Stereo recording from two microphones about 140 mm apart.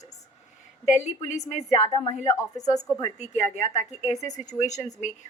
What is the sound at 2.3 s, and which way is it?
Speech, 20° left (ahead or behind).